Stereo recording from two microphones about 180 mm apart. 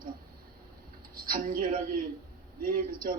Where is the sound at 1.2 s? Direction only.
55° right (ahead or behind).